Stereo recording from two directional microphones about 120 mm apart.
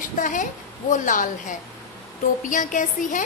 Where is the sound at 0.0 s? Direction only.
90° left.